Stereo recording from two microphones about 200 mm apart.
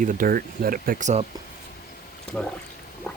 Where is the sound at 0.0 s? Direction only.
45° right (ahead or behind).